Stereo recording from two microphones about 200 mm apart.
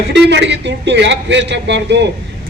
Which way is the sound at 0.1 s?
60° right (ahead or behind).